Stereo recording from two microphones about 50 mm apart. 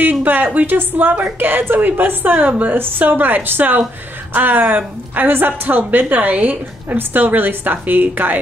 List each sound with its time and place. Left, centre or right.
0.2 s a woman's voice: right